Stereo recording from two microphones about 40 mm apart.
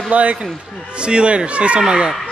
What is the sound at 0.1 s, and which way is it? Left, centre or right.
A man's voice, right.